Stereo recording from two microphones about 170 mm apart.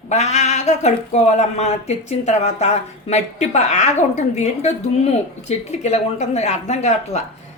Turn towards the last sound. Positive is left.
turn(degrees=40)  # may be behind; listen again after turning